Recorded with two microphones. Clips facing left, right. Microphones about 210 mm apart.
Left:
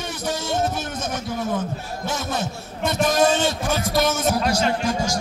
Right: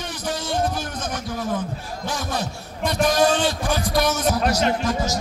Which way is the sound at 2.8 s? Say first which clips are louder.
Even; 5° left (ahead or behind).